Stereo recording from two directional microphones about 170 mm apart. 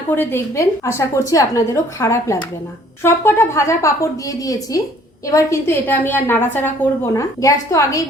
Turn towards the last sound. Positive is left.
turn(degrees=20)  # may be behind; listen again after turning